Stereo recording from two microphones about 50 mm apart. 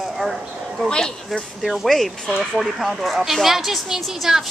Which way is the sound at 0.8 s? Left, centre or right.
Centre.